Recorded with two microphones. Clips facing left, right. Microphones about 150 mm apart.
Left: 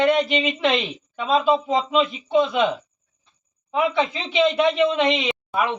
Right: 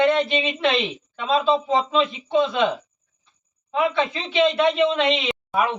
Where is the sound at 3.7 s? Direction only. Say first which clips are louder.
Even; 15° left (ahead or behind).